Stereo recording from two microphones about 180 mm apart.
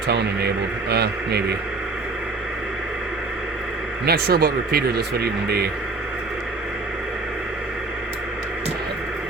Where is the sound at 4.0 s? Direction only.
60° right (ahead or behind).